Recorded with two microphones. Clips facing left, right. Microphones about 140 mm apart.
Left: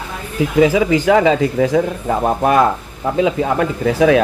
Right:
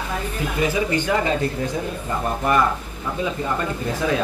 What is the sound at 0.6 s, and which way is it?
Speech, 90° left.